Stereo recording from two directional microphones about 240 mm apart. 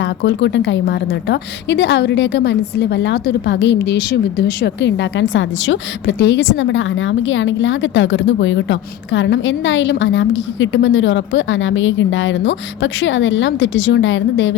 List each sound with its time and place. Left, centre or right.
0.0 s a woman's voice: left